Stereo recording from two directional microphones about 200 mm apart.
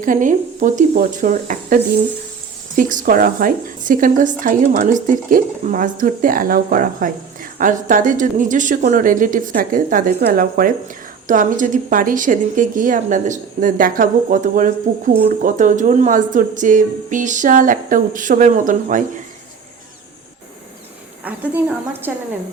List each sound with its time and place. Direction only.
0.0 s a woman's voice: 40° right (ahead or behind)
21.3 s speech: 5° right (ahead or behind)